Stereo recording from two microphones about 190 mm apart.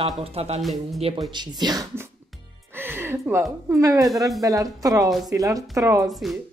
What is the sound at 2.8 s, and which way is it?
Music, 10° right (ahead or behind).